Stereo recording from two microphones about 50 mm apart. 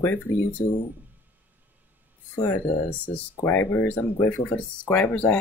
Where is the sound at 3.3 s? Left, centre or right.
Left.